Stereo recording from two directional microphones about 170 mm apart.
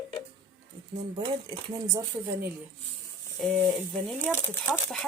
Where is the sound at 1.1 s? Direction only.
25° right (ahead or behind).